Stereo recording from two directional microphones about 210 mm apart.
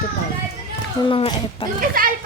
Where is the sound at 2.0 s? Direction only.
40° right (ahead or behind).